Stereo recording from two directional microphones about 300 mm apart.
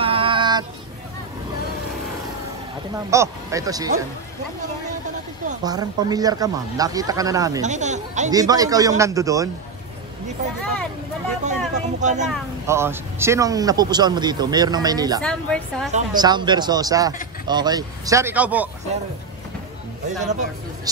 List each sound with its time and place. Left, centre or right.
0.0 s child singing: centre
3.1 s speech: centre
5.6 s speech: centre
7.6 s speech: right
8.3 s speech: centre
11.4 s speech: right
12.3 s speech: centre
15.2 s a woman's voice: centre
15.9 s speech: centre
20.1 s speech: right